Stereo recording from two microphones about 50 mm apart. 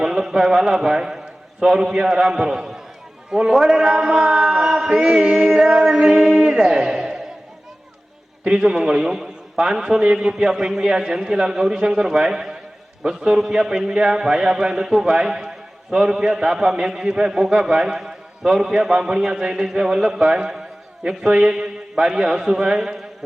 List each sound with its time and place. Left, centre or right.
0.0 s a man's voice: centre
3.8 s a man's voice: centre
4.6 s chant: centre
5.2 s music: centre
5.5 s music: centre
8.4 s a man's voice: centre